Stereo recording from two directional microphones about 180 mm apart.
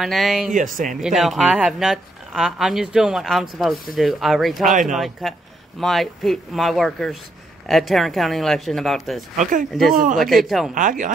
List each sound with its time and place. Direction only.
0.0 s speech: centre (ahead or behind)
0.5 s speech: 45° right (ahead or behind)
1.0 s speech: centre (ahead or behind)
4.6 s speech: 45° right (ahead or behind)
4.9 s speech: centre (ahead or behind)
9.4 s speech: 50° right (ahead or behind)
10.3 s speech: centre (ahead or behind)
10.7 s speech: 45° right (ahead or behind)